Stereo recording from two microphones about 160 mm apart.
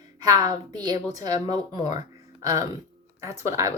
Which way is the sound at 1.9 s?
20° right (ahead or behind).